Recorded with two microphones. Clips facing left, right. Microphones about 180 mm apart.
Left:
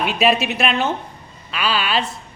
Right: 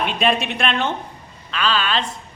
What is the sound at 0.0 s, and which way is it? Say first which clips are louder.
A woman's voice: left 2 dB; 5° left (ahead or behind).